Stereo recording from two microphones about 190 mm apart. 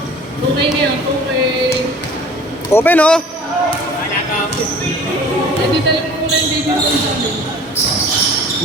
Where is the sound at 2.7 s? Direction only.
10° left (ahead or behind).